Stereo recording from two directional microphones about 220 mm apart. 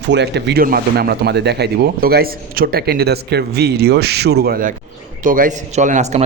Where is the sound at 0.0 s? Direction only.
50° right (ahead or behind).